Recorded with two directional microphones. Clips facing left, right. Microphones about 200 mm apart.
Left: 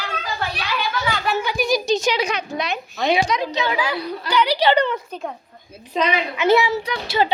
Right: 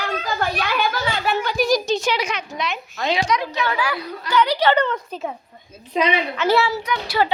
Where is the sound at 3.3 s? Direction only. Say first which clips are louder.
Even; 20° left (ahead or behind).